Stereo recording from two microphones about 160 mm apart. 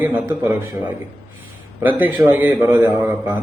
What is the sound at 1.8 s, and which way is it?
A man's voice, 10° right (ahead or behind).